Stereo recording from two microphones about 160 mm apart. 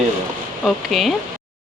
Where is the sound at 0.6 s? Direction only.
Centre (ahead or behind).